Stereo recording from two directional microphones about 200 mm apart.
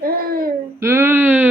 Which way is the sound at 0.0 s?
50° right (ahead or behind).